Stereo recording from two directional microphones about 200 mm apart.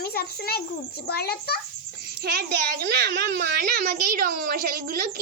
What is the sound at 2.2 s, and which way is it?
Speech, 50° right (ahead or behind).